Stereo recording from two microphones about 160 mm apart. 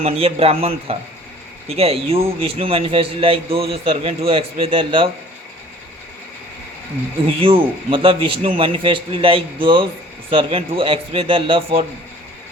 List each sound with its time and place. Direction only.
0.0 s a man's voice: 40° right (ahead or behind)
7.4 s a man's voice: 35° right (ahead or behind)